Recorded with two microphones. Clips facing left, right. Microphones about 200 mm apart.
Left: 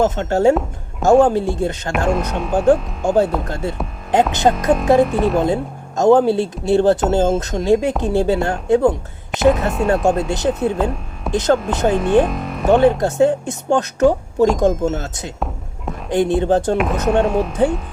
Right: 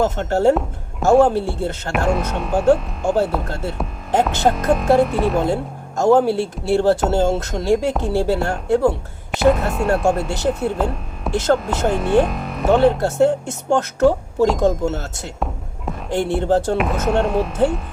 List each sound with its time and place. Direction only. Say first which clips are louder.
0.0 s speech: left 2 dB; 15° left (ahead or behind)
2.0 s speech: left 1 dB; centre (ahead or behind)
3.5 s speech: left 2 dB; 15° left (ahead or behind)
4.5 s speech: left 1 dB; centre (ahead or behind)
6.0 s speech: left 2 dB; 20° left (ahead or behind)
9.3 s speech: left 1 dB; centre (ahead or behind)
10.2 s speech: left 2 dB; 15° left (ahead or behind)
10.5 s speech: left 2 dB; centre (ahead or behind)
11.3 s speech: left 1 dB; 15° left (ahead or behind)
12.2 s speech: left 1 dB; centre (ahead or behind)
13.0 s speech: left 1 dB; 15° left (ahead or behind)
16.7 s speech: left 2 dB; centre (ahead or behind)